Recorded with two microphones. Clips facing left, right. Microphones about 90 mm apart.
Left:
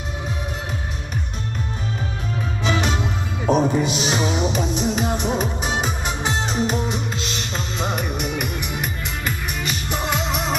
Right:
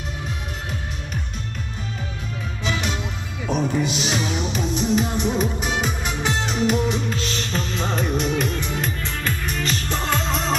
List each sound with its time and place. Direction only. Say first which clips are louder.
2.6 s music: left 4 dB; 35° left (ahead or behind)
4.0 s music: left 3 dB; 25° left (ahead or behind)
8.0 s music: right 3 dB; 5° left (ahead or behind)